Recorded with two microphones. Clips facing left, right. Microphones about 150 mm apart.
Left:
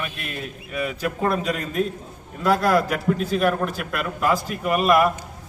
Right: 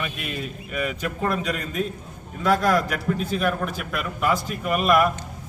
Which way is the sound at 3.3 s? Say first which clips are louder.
Left 4 dB; 40° left (ahead or behind).